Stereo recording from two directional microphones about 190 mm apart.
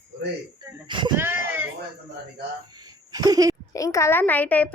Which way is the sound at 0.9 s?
25° right (ahead or behind).